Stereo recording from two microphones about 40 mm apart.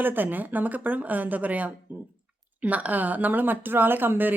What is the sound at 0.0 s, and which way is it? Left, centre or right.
A woman's voice, right.